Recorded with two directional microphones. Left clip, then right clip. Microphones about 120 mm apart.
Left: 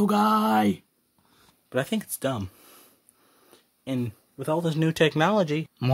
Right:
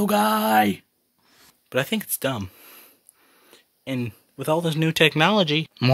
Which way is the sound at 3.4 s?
10° right (ahead or behind).